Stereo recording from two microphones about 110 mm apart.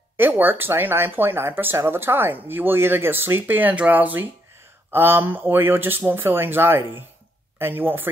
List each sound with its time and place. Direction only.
0.2 s speech: 20° right (ahead or behind)